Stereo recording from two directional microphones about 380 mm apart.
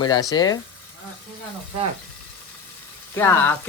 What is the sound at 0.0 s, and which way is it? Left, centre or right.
Speech, centre.